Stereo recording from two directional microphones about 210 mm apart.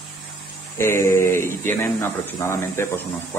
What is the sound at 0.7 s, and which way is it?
Speech, 10° left (ahead or behind).